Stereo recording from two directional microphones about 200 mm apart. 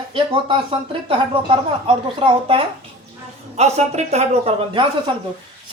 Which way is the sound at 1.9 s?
25° right (ahead or behind).